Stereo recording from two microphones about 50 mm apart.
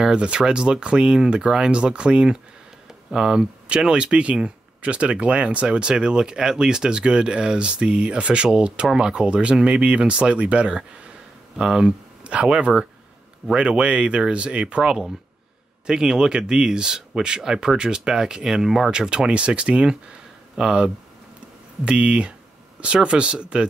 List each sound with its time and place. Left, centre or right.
0.0 s speech: centre
18.9 s speech: centre